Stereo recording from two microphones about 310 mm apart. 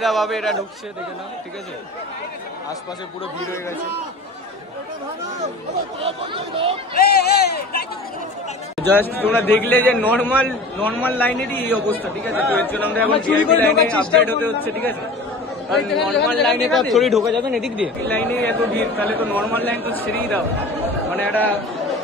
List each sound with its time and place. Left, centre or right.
0.0 s speech: centre
5.9 s speech: centre
6.9 s a sound: left
9.0 s a man's voice: centre